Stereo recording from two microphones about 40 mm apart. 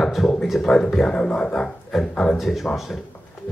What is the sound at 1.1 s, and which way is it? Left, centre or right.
Speech, left.